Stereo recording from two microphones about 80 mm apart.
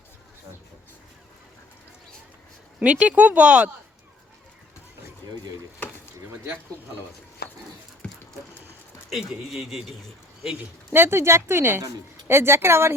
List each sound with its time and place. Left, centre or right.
2.8 s speech: centre
8.0 s a sound: centre
9.0 s a man's voice: centre
10.9 s speech: right